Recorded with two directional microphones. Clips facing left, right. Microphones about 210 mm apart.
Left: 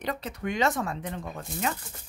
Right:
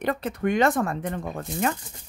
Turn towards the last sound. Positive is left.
turn(degrees=-55)  # may be behind; listen again after turning